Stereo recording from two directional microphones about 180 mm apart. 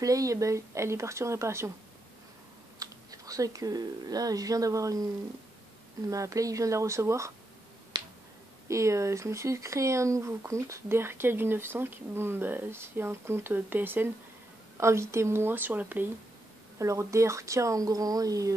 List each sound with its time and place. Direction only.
0.0 s speech: 20° right (ahead or behind)
2.8 s speech: 20° right (ahead or behind)
6.0 s speech: 20° right (ahead or behind)
8.6 s speech: 15° right (ahead or behind)